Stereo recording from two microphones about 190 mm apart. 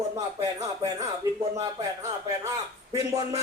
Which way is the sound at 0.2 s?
20° right (ahead or behind).